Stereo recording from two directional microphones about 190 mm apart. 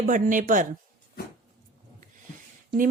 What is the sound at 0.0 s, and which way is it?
Speech, 45° right (ahead or behind).